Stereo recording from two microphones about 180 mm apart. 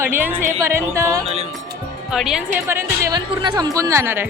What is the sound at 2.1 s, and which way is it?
A woman's voice, centre (ahead or behind).